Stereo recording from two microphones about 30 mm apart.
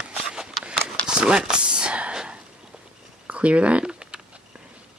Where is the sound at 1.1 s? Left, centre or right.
Right.